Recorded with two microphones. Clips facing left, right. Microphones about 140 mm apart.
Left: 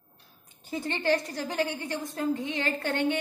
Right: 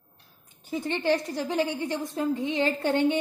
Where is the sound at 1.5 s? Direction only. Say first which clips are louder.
Right 3 dB; 20° right (ahead or behind).